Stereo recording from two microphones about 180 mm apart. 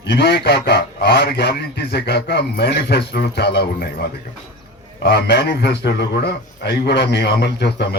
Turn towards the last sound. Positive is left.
turn(degrees=70)  # may be behind; listen again after turning